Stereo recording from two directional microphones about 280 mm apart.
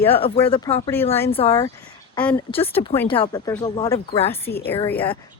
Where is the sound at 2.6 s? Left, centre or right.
Centre.